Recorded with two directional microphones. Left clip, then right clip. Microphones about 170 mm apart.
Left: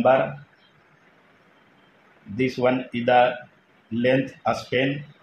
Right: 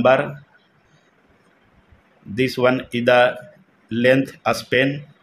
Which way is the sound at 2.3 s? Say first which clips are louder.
Right 4 dB; 45° right (ahead or behind).